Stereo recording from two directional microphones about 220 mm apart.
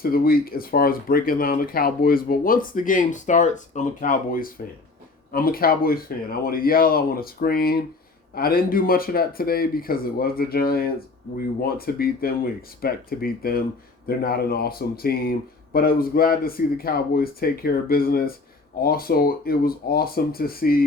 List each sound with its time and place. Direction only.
0.0 s speech: 40° left (ahead or behind)